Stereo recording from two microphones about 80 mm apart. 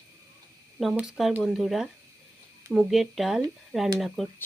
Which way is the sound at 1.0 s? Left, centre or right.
Centre.